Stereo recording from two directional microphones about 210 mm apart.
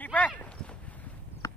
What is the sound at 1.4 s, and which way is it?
Horse, 15° left (ahead or behind).